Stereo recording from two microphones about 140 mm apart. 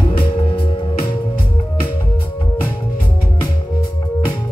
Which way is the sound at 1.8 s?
15° left (ahead or behind).